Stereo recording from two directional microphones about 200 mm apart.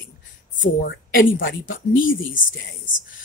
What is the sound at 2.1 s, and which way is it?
Speech, 45° left (ahead or behind).